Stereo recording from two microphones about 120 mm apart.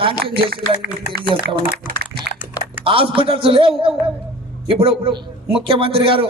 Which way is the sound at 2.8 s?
50° right (ahead or behind).